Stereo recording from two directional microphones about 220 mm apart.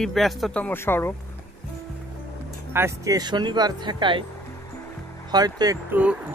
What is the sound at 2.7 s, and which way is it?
Speech, 15° right (ahead or behind).